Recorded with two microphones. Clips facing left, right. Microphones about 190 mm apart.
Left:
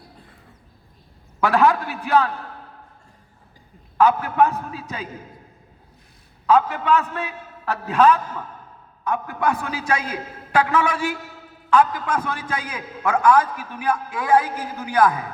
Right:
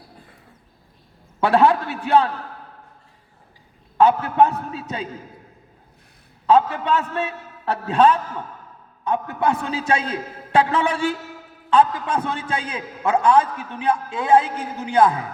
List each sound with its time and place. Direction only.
1.4 s a man's voice: 30° right (ahead or behind)
3.9 s a man's voice: 25° right (ahead or behind)
6.5 s a man's voice: 30° right (ahead or behind)